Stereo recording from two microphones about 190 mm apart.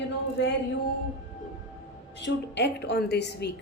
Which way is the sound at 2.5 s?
65° left (ahead or behind).